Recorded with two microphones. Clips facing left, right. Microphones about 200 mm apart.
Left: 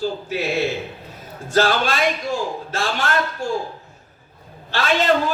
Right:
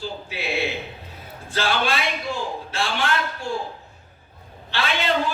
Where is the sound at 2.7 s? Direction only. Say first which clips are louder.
Left 1 dB; 45° left (ahead or behind).